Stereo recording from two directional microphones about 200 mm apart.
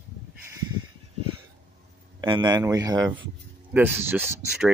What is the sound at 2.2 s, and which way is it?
A man's voice, 20° right (ahead or behind).